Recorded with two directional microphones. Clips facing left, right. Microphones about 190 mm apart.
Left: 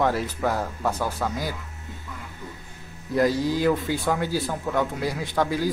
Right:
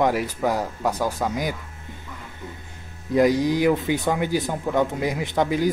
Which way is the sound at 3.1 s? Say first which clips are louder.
Right 3 dB; 15° right (ahead or behind).